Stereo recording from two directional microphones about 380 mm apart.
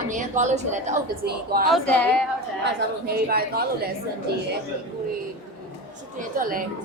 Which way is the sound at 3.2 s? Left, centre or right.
Right.